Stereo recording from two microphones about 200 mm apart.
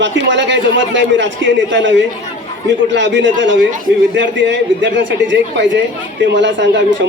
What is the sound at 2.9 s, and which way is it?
Speech, 65° right (ahead or behind).